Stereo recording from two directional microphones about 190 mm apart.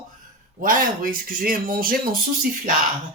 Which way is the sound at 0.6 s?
45° right (ahead or behind).